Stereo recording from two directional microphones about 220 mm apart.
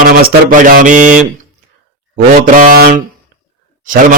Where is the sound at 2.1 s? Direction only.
40° right (ahead or behind).